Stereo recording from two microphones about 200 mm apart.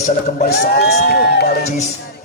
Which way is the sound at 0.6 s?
55° left (ahead or behind).